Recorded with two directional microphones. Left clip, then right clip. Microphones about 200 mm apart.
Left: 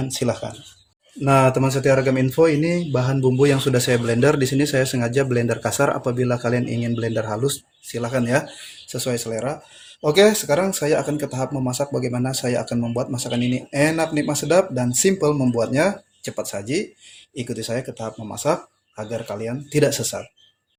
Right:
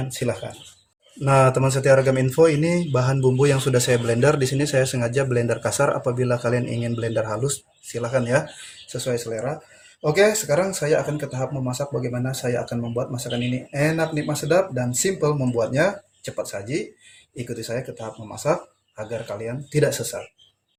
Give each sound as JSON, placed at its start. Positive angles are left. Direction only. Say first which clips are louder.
{"t": 0.1, "sound": "speech", "louder": "left 2 dB", "side_deg": 40}
{"t": 1.2, "sound": "speech", "louder": "left 1 dB", "side_deg": 25}
{"t": 8.9, "sound": "speech", "louder": "left 1 dB", "side_deg": 40}